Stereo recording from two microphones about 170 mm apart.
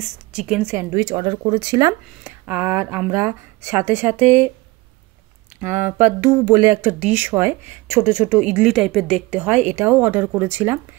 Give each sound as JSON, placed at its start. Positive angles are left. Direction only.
{"t": 0.0, "sound": "a woman's voice", "side_deg": -5}
{"t": 0.9, "sound": "speech", "side_deg": -25}
{"t": 5.6, "sound": "speech", "side_deg": -10}